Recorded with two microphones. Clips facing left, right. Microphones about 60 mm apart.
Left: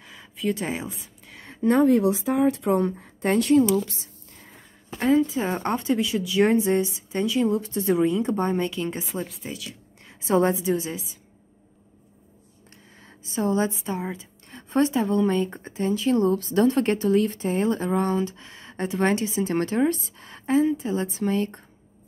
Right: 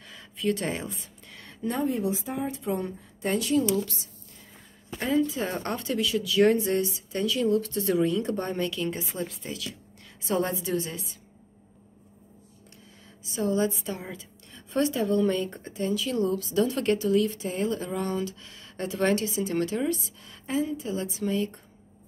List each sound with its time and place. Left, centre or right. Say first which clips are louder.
0.0 s a sound: left 1 dB; centre
1.6 s a woman's voice: left 10 dB; left
1.9 s speech: left 8 dB; left
5.4 s a woman's voice: left 5 dB; centre
9.4 s a woman's voice: left 2 dB; centre
10.0 s a woman's voice: left 7 dB; left
10.6 s a woman's voice: left 4 dB; centre
13.2 s a woman's voice: left 2 dB; left
19.4 s speech: left 4 dB; left